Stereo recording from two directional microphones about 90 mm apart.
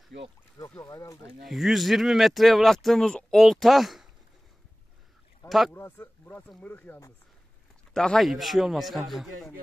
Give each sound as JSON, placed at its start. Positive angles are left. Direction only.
{"t": 0.8, "sound": "speech", "side_deg": 40}
{"t": 1.4, "sound": "speech", "side_deg": 0}
{"t": 5.7, "sound": "speech", "side_deg": 25}
{"t": 7.9, "sound": "speech", "side_deg": 5}